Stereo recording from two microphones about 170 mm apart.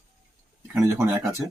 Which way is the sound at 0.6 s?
15° right (ahead or behind).